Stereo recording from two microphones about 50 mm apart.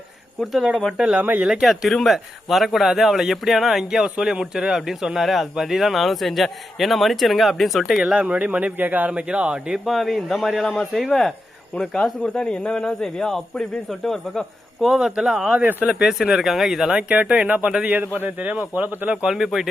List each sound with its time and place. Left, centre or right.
0.9 s speech: centre
1.2 s a man's voice: right
1.6 s a man's voice: centre
7.9 s speech: centre
8.2 s a man's voice: right
9.0 s speech: right
9.8 s a man's voice: centre
14.8 s speech: centre
15.5 s speech: right
15.9 s a man's voice: centre
16.9 s speech: right
17.8 s a man's voice: right
19.2 s a man's voice: centre